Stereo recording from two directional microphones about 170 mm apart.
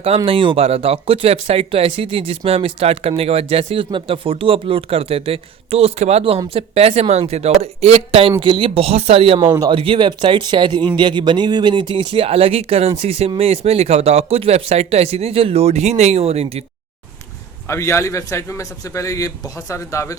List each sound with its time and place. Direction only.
0.3 s speech: 30° right (ahead or behind)
9.4 s speech: 20° right (ahead or behind); by 16.6 s 40° right (ahead or behind)
17.7 s a man's voice: 15° left (ahead or behind)